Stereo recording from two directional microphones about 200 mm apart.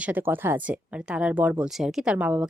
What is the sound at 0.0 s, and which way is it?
Speech, 10° right (ahead or behind).